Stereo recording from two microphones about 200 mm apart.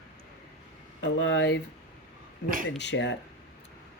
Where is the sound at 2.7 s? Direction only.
60° left (ahead or behind).